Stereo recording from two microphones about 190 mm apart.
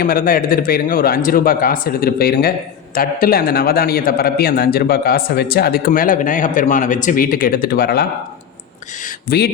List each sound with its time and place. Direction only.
0.0 s a man's voice: 50° left (ahead or behind)